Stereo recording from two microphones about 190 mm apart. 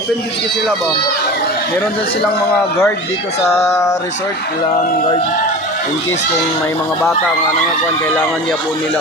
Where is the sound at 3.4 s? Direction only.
15° left (ahead or behind).